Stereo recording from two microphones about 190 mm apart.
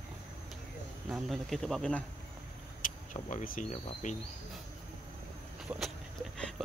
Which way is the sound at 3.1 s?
40° left (ahead or behind).